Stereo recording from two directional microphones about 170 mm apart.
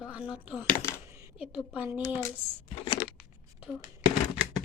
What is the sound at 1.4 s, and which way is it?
Speech, 5° right (ahead or behind).